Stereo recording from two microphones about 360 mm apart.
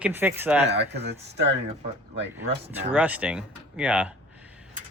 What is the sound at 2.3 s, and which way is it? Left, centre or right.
Speech, centre.